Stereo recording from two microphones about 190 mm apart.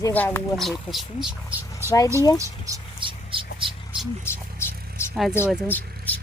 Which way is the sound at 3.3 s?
25° right (ahead or behind).